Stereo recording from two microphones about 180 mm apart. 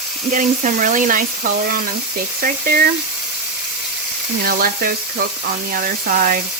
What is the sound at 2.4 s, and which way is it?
Speech, 55° right (ahead or behind).